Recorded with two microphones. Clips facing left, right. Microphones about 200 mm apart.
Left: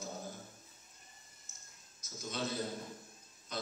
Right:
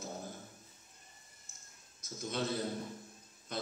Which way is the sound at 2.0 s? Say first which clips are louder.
Right 3 dB; 55° right (ahead or behind).